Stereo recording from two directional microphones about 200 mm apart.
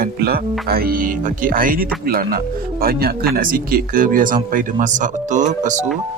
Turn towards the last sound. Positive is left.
turn(degrees=-35)  # may be behind; listen again after turning